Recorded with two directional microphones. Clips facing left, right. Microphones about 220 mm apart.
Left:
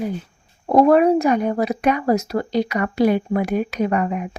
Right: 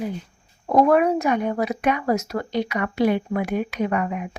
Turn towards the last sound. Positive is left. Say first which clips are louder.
# left 3 dB
turn(degrees=35)  # may be behind; listen again after turning